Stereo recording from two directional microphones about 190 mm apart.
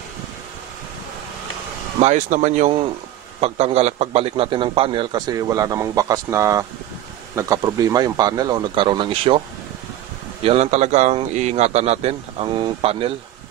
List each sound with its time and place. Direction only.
2.0 s a man's voice: 40° right (ahead or behind)
10.4 s a man's voice: 35° right (ahead or behind)